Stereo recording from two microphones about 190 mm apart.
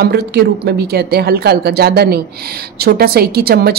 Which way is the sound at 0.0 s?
60° right (ahead or behind).